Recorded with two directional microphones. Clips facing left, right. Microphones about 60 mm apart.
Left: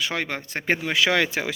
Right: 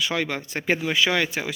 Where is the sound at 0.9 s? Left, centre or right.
Left.